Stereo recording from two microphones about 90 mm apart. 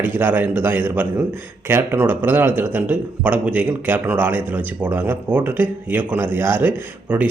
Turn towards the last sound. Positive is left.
turn(degrees=-15)  # may be behind; listen again after turning